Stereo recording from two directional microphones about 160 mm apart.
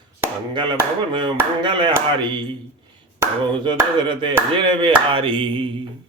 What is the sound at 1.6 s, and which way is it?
Speech, 30° right (ahead or behind).